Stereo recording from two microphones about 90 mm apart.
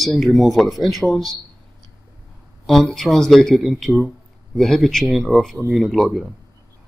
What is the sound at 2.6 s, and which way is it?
Speech, centre (ahead or behind).